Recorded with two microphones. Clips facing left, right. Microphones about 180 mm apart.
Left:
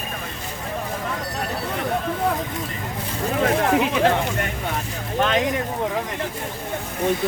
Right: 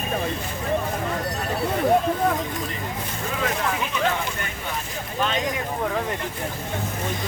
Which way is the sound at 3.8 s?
75° left (ahead or behind).